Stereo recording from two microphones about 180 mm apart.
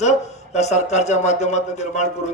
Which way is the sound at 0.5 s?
40° left (ahead or behind).